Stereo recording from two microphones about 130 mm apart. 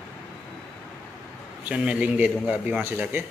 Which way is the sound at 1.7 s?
10° right (ahead or behind).